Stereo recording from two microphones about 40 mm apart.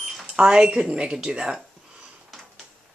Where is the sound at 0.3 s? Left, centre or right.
Centre.